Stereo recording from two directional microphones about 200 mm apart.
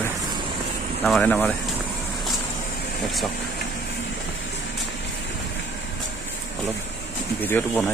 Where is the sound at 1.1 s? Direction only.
5° left (ahead or behind).